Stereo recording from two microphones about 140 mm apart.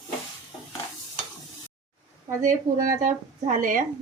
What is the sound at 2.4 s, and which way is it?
Speech, 75° right (ahead or behind).